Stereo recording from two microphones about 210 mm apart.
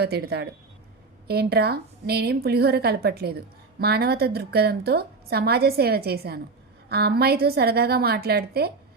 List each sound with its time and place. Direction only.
0.0 s a woman's voice: 50° right (ahead or behind)